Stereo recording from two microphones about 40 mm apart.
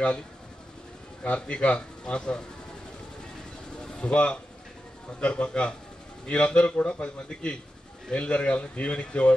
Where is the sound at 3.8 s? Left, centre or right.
Left.